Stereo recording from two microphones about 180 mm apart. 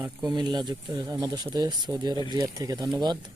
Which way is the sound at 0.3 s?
25° right (ahead or behind).